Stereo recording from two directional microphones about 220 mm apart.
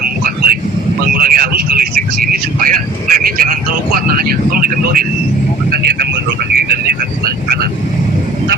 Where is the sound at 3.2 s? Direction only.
40° right (ahead or behind).